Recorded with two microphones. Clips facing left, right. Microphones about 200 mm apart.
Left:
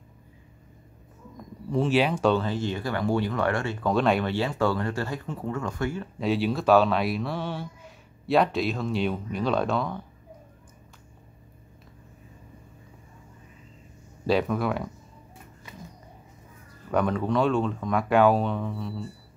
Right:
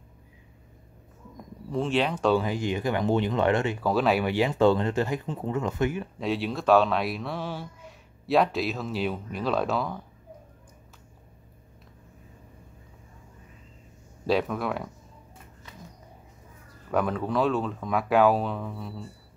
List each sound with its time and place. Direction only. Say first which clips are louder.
1.7 s speech: left 3 dB; 5° left (ahead or behind)
2.3 s speech: right 1 dB; 15° right (ahead or behind)
3.8 s speech: left 3 dB; 5° right (ahead or behind)
4.3 s speech: right 4 dB; 15° right (ahead or behind)
6.1 s speech: left 3 dB; centre (ahead or behind)
14.2 s speech: left 2 dB; centre (ahead or behind)
16.9 s speech: left 2 dB; centre (ahead or behind)